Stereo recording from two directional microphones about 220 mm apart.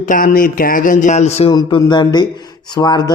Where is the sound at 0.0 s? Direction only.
40° left (ahead or behind).